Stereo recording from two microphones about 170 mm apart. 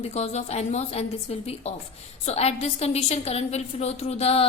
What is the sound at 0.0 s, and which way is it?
Speech, 40° left (ahead or behind).